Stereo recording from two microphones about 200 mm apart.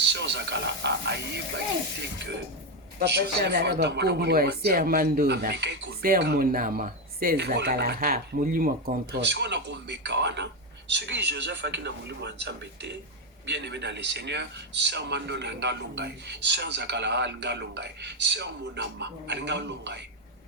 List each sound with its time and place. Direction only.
0.0 s a man's voice: 60° right (ahead or behind)
3.0 s speech: 55° right (ahead or behind)
9.1 s a man's voice: 60° right (ahead or behind)